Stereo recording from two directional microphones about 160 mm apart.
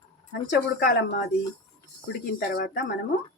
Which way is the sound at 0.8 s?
90° left.